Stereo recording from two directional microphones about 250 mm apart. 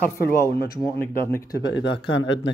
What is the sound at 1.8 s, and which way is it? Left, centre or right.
Speech, left.